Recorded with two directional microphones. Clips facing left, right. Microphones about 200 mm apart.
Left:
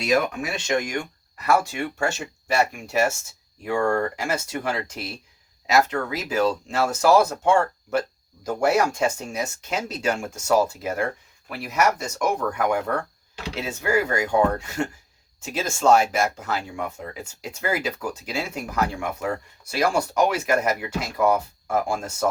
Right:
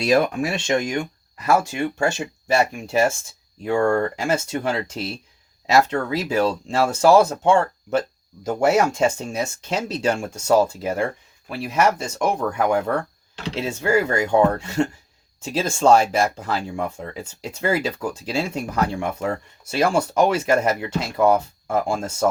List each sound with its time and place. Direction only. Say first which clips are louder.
0.0 s speech: right 4 dB; 30° right (ahead or behind)